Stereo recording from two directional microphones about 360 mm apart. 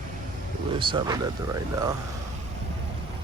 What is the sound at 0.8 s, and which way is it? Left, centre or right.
Speech, centre.